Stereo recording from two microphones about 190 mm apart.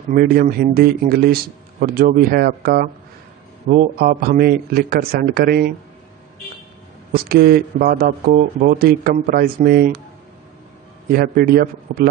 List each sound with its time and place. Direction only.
0.1 s speech: 50° right (ahead or behind)
7.1 s speech: 55° right (ahead or behind)
11.1 s speech: 50° right (ahead or behind)